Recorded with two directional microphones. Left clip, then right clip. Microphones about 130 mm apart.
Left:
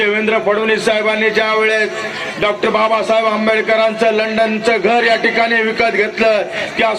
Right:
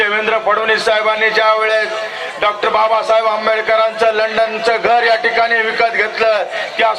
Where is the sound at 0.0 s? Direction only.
35° right (ahead or behind).